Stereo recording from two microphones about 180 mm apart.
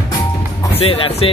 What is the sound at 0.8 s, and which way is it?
Speech, 30° left (ahead or behind).